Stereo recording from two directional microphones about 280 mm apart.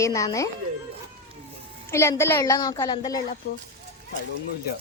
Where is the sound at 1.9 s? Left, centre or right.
Centre.